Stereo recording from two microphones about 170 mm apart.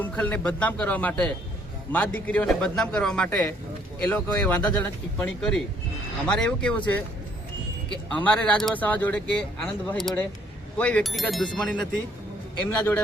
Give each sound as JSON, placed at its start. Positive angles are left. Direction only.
{"t": 0.0, "sound": "a man's voice", "side_deg": 10}
{"t": 8.1, "sound": "a man's voice", "side_deg": 5}